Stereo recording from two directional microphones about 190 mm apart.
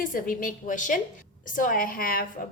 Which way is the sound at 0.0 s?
45° left (ahead or behind).